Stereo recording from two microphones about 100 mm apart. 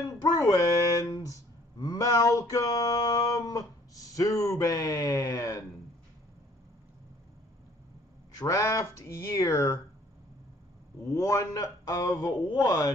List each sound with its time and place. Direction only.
0.1 s speech: 40° left (ahead or behind)
8.4 s speech: 35° left (ahead or behind)
11.1 s speech: 35° left (ahead or behind)